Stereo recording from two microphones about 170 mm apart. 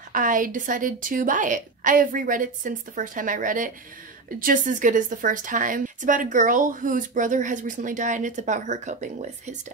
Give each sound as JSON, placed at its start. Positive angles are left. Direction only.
{"t": 0.1, "sound": "a woman's voice", "side_deg": -50}